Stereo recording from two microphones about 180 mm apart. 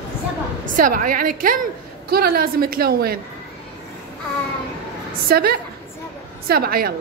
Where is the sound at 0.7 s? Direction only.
50° right (ahead or behind).